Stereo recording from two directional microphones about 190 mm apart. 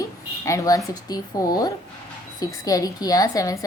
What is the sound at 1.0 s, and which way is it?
A woman's voice, 20° left (ahead or behind).